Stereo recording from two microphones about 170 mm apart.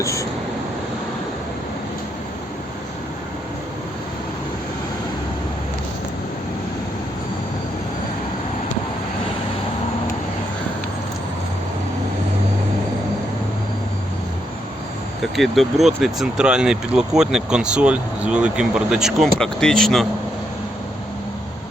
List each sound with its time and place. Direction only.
0.0 s vehicle: 20° left (ahead or behind)
15.4 s speech: centre (ahead or behind)